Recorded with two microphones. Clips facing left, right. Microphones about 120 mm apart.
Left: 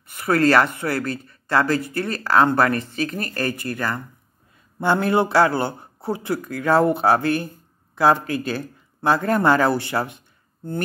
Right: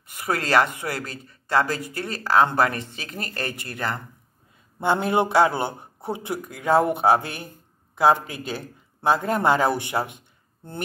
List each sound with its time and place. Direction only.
0.1 s a man's voice: 20° right (ahead or behind)